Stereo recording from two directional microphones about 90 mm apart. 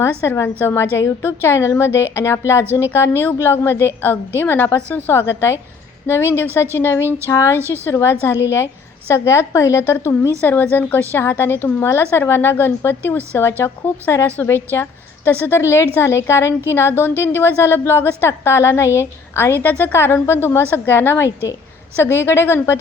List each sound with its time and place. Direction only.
0.0 s a woman's voice: 25° left (ahead or behind)